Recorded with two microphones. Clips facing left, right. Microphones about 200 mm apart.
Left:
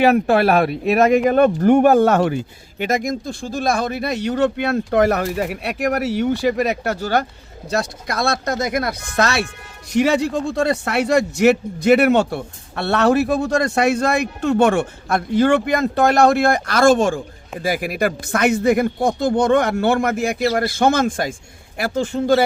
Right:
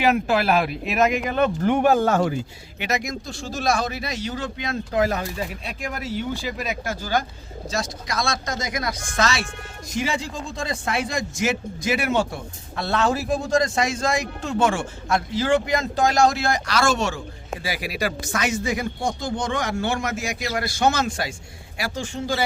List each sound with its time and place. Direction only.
0.0 s speech: 55° left (ahead or behind)
2.7 s speech: 50° left (ahead or behind)
20.4 s a man's voice: 40° left (ahead or behind)
20.7 s a man's voice: 55° left (ahead or behind)